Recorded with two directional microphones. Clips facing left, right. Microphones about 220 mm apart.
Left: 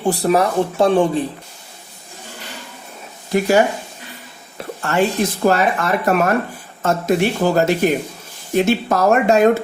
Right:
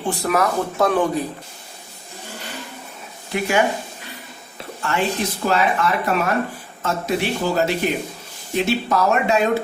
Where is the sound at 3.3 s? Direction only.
40° left (ahead or behind).